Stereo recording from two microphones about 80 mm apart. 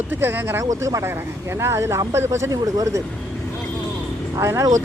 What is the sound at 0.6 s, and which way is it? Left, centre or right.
Speech, right.